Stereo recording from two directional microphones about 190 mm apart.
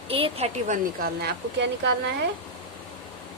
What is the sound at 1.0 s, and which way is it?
Speech, 60° right (ahead or behind).